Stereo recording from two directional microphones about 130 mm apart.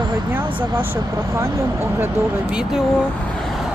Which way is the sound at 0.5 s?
40° right (ahead or behind).